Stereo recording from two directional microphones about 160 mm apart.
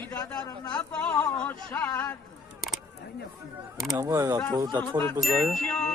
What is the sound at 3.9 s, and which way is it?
Speech, 15° right (ahead or behind).